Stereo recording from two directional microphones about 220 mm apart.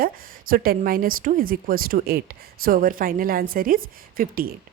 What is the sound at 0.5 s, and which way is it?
A woman's voice, 40° right (ahead or behind).